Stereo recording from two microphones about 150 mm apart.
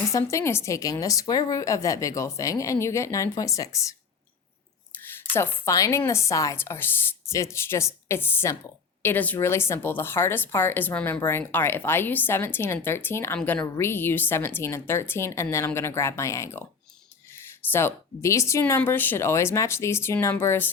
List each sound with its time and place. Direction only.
0.1 s speech: 20° left (ahead or behind)
5.3 s speech: 20° left (ahead or behind)
17.7 s speech: 15° left (ahead or behind)